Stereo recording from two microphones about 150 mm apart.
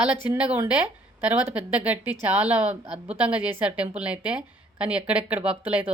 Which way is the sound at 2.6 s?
45° right (ahead or behind).